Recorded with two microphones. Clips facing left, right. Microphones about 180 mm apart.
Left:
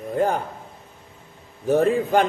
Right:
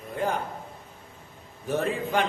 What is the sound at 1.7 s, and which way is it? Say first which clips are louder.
Speech: left 8 dB; 40° left (ahead or behind).